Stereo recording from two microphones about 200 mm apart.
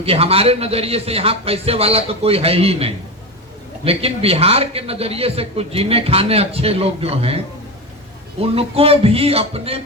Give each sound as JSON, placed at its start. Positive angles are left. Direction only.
{"t": 0.0, "sound": "a man's voice", "side_deg": -30}
{"t": 8.4, "sound": "a man's voice", "side_deg": -30}